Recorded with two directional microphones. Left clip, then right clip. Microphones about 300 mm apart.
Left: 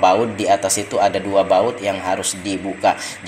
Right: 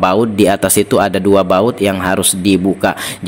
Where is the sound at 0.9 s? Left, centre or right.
Right.